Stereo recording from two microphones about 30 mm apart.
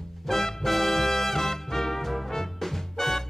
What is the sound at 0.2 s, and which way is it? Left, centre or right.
Music, centre.